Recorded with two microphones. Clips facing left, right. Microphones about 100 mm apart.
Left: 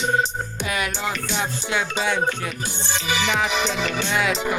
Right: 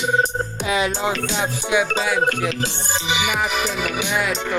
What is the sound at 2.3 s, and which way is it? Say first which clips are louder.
Music: right 5 dB; 90° right.